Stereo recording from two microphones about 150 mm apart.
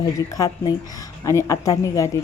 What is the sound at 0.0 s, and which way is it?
Speech, 25° left (ahead or behind).